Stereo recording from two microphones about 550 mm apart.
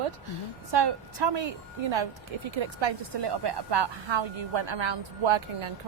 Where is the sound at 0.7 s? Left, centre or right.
Right.